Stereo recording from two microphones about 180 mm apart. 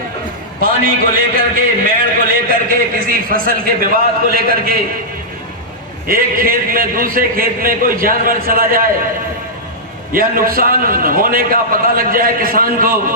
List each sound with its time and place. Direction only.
0.6 s a man's voice: 50° right (ahead or behind)
6.1 s a man's voice: 55° right (ahead or behind)
10.1 s a man's voice: 50° right (ahead or behind)